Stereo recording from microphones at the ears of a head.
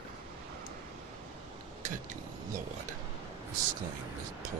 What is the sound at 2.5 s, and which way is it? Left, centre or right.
Speech, right.